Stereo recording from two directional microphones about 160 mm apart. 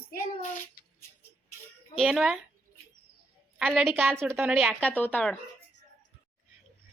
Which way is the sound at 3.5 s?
5° right (ahead or behind).